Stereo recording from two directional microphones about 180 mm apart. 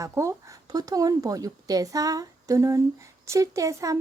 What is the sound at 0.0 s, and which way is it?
A child's voice, 15° right (ahead or behind).